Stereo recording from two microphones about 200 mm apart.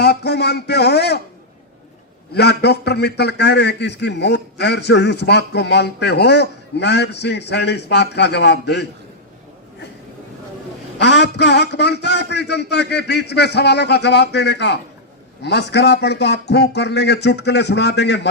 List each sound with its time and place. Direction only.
0.0 s a man's voice: 55° left (ahead or behind)
2.3 s a man's voice: 55° left (ahead or behind)
10.9 s a man's voice: 60° left (ahead or behind)